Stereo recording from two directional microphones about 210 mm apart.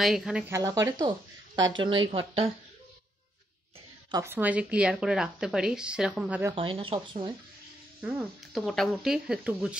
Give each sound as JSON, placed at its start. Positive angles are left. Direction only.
{"t": 0.0, "sound": "speech", "side_deg": 0}
{"t": 4.1, "sound": "speech", "side_deg": -10}
{"t": 6.5, "sound": "speech", "side_deg": -25}
{"t": 8.0, "sound": "speech", "side_deg": -5}